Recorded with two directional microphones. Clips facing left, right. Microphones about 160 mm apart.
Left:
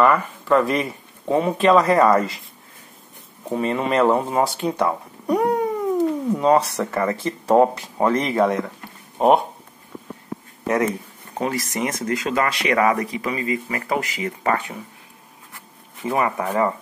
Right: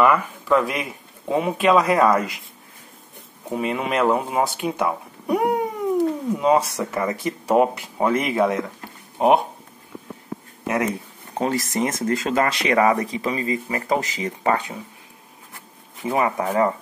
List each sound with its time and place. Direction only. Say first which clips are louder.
0.0 s speech: even; 5° right (ahead or behind)
3.4 s speech: left 2 dB; 5° right (ahead or behind)
11.3 s speech: right 2 dB; 25° right (ahead or behind)
16.0 s speech: even; 15° right (ahead or behind)